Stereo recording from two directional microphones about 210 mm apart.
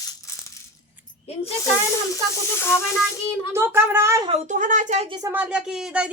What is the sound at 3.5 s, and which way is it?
Speech, 10° right (ahead or behind).